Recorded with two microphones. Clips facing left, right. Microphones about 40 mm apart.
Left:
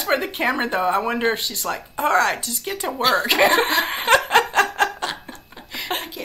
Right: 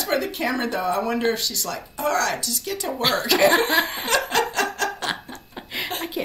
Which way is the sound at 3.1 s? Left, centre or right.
Left.